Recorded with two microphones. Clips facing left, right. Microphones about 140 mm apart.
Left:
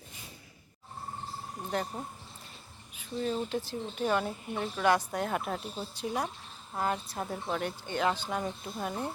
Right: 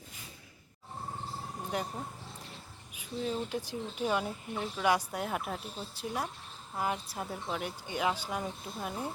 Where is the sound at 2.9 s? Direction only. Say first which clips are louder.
Left 2 dB; 10° right (ahead or behind).